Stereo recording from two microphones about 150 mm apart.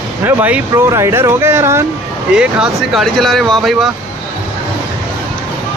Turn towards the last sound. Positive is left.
turn(degrees=0)  # may be behind; listen again after turning